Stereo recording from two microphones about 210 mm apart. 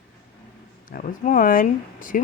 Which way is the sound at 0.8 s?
40° left (ahead or behind).